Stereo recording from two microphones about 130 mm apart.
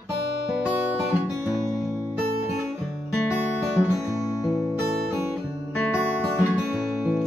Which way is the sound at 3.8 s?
25° left (ahead or behind).